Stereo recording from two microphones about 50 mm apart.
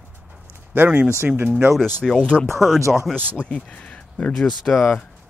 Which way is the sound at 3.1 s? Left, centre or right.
Right.